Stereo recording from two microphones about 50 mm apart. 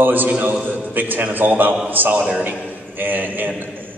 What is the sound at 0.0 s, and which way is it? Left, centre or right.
A man's voice, right.